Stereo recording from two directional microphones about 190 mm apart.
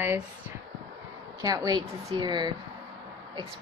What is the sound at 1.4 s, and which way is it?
A woman's voice, 20° right (ahead or behind).